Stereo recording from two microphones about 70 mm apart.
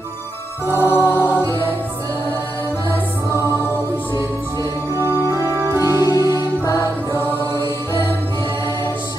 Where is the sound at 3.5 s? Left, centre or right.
Left.